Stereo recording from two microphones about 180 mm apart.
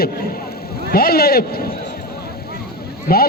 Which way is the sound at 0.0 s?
55° left (ahead or behind).